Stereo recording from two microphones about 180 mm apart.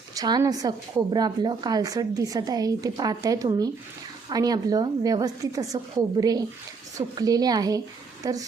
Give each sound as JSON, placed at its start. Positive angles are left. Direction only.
{"t": 0.1, "sound": "a woman's voice", "side_deg": -20}